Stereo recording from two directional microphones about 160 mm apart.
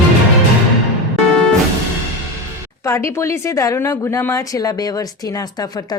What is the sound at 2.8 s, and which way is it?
Speech, 15° left (ahead or behind).